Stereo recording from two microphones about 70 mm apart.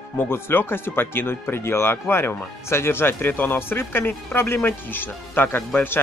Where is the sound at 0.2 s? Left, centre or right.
Left.